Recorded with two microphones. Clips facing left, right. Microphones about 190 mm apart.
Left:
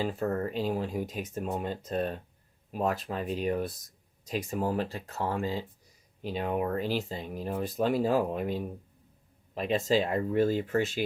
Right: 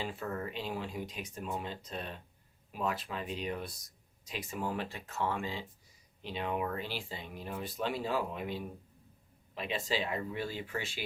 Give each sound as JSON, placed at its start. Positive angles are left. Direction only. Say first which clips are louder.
{"t": 0.0, "sound": "speech", "louder": "left 8 dB", "side_deg": 40}